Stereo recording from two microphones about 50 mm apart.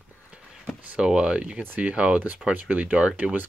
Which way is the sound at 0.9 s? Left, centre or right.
Centre.